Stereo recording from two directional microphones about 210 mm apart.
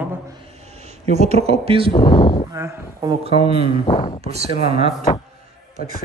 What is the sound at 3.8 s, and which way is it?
Speech, 25° left (ahead or behind).